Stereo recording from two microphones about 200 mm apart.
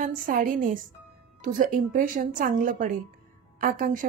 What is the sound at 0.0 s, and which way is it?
A woman's voice, 45° right (ahead or behind).